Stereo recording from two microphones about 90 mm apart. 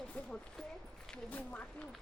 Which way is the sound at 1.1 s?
15° left (ahead or behind).